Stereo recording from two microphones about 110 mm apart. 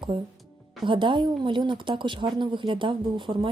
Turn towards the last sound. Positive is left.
turn(degrees=-50)  # may be behind; listen again after turning